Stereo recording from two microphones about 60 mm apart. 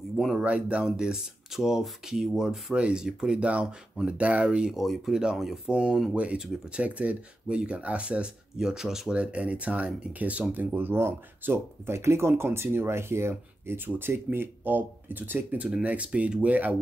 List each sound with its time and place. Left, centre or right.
0.1 s speech: centre
0.4 s speech: centre
3.3 s speech: right
4.7 s speech: centre
6.8 s speech: right
8.5 s speech: centre
9.1 s speech: centre